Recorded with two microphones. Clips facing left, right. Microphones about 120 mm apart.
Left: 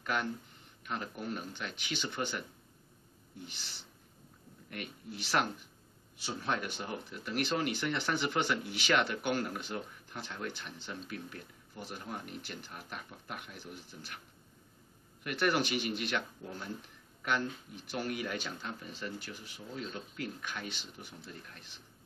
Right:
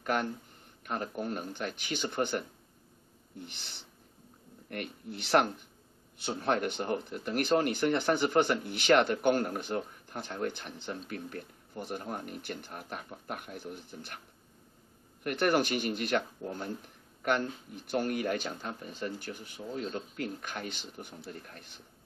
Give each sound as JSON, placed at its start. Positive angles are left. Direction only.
{"t": 0.0, "sound": "speech", "side_deg": -45}
{"t": 4.6, "sound": "speech", "side_deg": -55}
{"t": 15.2, "sound": "speech", "side_deg": -45}